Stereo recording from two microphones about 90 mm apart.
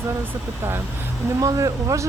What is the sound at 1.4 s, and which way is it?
Speech, 40° right (ahead or behind).